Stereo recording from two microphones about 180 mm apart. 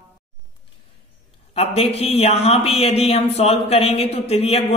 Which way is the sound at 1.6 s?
35° left (ahead or behind).